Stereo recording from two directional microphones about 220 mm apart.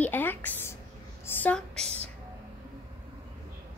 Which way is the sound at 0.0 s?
10° left (ahead or behind).